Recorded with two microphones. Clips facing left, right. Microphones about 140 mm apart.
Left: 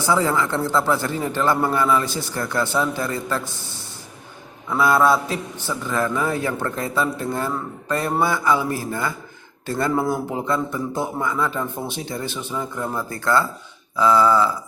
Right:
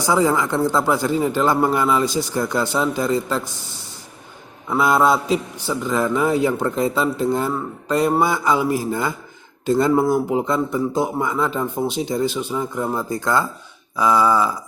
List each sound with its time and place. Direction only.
0.0 s a man's voice: 15° right (ahead or behind)